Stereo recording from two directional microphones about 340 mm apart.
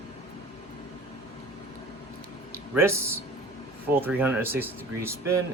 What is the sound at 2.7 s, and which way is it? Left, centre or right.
Speech, centre.